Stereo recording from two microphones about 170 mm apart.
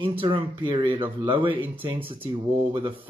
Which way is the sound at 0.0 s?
30° right (ahead or behind).